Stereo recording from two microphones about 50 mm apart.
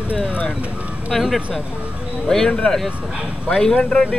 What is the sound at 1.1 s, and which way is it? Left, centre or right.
Speech, centre.